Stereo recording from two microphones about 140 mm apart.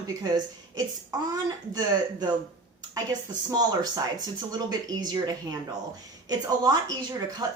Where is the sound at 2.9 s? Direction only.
25° right (ahead or behind).